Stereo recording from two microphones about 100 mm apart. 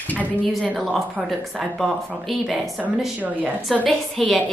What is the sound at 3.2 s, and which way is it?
Speech, 15° right (ahead or behind).